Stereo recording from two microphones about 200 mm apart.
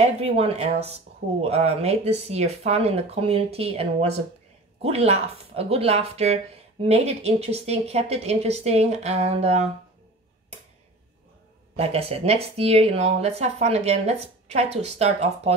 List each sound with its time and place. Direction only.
0.0 s speech: 30° right (ahead or behind)
11.7 s speech: 30° right (ahead or behind)